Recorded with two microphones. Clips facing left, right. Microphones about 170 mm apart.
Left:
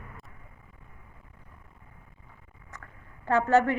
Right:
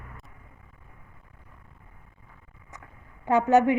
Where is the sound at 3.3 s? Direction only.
15° right (ahead or behind).